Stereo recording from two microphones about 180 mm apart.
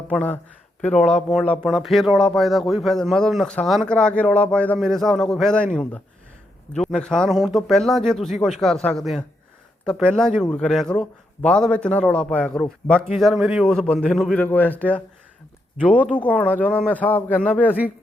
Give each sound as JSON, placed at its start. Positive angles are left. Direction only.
{"t": 0.1, "sound": "speech", "side_deg": 5}
{"t": 15.8, "sound": "speech", "side_deg": 5}